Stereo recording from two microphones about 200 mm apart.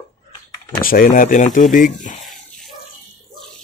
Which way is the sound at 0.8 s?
45° left (ahead or behind).